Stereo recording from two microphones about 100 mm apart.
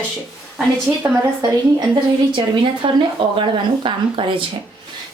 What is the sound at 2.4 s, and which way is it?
A woman's voice, 55° right (ahead or behind).